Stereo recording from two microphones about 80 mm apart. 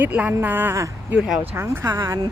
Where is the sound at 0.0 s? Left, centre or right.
Right.